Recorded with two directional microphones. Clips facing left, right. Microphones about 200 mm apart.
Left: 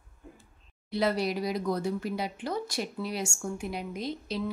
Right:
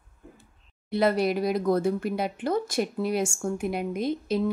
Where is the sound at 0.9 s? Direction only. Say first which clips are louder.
Right 5 dB; 55° right (ahead or behind).